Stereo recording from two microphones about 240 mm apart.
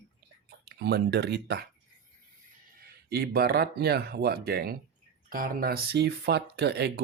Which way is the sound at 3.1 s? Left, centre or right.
Right.